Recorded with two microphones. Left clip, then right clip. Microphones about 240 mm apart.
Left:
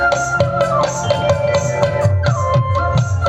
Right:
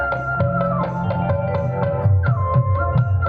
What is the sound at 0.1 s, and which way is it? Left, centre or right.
Music, left.